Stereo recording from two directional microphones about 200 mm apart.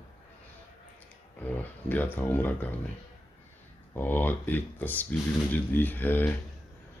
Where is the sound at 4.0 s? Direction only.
10° left (ahead or behind).